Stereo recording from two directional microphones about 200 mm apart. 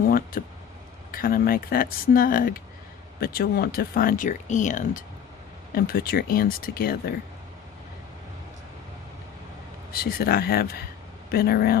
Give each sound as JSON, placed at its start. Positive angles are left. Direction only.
{"t": 0.0, "sound": "a sound", "side_deg": 45}
{"t": 1.1, "sound": "speech", "side_deg": 45}
{"t": 9.9, "sound": "speech", "side_deg": 50}